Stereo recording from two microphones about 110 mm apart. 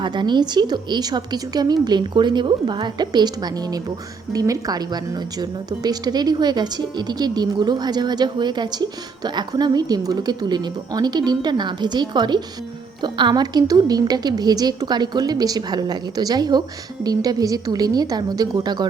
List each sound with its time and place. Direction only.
0.0 s a woman's voice: 45° right (ahead or behind)